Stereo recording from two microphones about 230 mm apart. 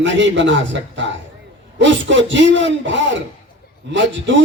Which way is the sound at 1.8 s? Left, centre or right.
Right.